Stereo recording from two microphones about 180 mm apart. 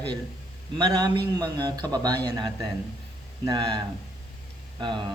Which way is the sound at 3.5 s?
25° right (ahead or behind).